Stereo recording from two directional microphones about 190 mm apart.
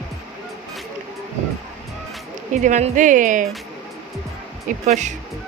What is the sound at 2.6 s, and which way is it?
Speech, 40° right (ahead or behind).